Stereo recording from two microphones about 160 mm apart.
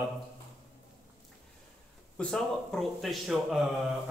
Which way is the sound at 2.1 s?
5° left (ahead or behind).